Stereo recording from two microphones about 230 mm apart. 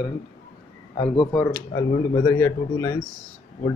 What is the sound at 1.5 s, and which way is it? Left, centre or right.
Speech, centre.